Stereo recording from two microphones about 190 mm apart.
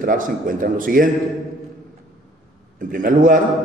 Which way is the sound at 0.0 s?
45° right (ahead or behind).